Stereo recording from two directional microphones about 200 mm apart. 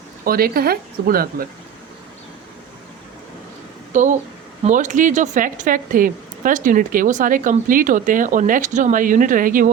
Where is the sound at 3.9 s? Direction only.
40° right (ahead or behind).